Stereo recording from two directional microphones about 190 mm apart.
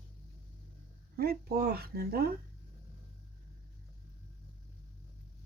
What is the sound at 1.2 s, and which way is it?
Speech, 55° right (ahead or behind).